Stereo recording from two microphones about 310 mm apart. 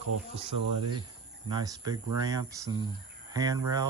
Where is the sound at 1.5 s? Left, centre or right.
Centre.